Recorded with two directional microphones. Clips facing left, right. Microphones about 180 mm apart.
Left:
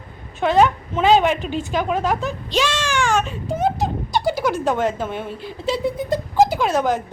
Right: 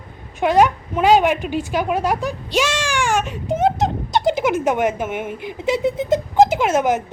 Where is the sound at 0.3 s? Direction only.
15° right (ahead or behind).